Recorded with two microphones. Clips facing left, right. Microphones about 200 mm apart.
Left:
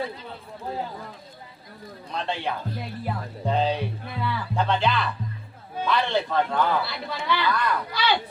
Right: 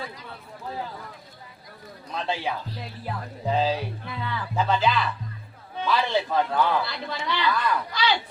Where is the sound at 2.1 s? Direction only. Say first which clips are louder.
Even; centre (ahead or behind).